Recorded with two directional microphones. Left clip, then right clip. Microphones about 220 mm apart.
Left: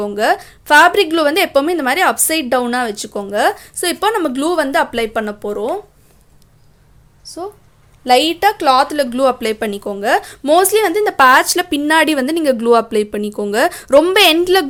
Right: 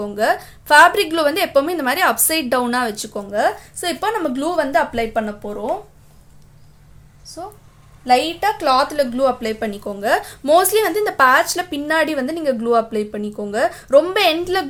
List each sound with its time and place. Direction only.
0.0 s a woman's voice: 30° left (ahead or behind); by 5.7 s 45° left (ahead or behind)
8.0 s a woman's voice: 50° left (ahead or behind); by 14.7 s 30° left (ahead or behind)